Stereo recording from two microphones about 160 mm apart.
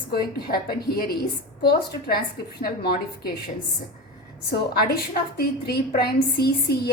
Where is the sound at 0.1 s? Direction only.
70° left (ahead or behind).